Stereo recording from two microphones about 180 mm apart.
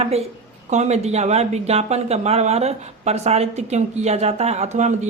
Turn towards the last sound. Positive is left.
turn(degrees=-40)  # may be behind; listen again after turning